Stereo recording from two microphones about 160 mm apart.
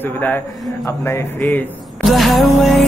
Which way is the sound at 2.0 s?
Centre (ahead or behind).